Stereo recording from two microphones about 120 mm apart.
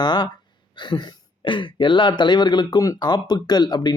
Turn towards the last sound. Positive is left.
turn(degrees=35)  # may be behind; listen again after turning